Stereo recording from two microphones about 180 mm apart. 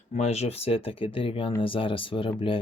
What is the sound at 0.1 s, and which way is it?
Speech, 35° left (ahead or behind).